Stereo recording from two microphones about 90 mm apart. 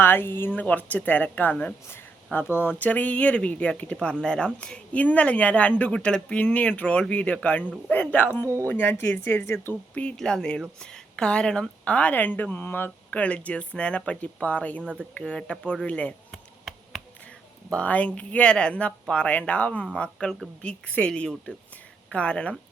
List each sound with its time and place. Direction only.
0.0 s speech: 25° left (ahead or behind)
9.9 s speech: 15° left (ahead or behind)
16.3 s a sound: centre (ahead or behind)
17.7 s speech: 15° left (ahead or behind)